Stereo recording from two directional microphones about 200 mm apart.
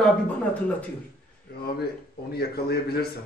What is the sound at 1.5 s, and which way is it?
A man's voice, 55° left (ahead or behind).